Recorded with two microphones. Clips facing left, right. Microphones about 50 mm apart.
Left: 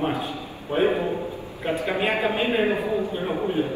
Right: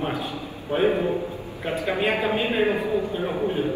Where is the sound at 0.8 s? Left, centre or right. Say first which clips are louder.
Even; left.